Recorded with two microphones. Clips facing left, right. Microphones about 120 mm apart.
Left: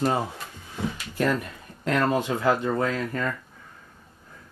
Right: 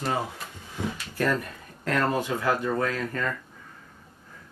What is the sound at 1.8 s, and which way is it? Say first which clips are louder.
Speech: left 2 dB; 15° left (ahead or behind).